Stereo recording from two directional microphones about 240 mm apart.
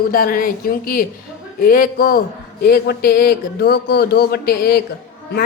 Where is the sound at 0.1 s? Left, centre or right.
Left.